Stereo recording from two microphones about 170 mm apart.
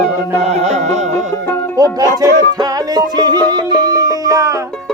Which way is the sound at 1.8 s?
20° right (ahead or behind).